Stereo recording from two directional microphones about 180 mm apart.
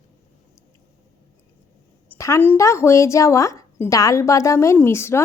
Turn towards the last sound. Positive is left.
turn(degrees=15)  # may be behind; listen again after turning